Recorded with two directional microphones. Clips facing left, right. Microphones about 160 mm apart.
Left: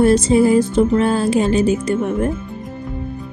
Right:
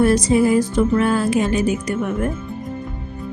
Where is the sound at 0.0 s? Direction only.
25° left (ahead or behind).